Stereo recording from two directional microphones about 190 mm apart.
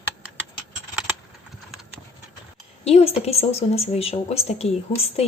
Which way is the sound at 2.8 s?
35° left (ahead or behind).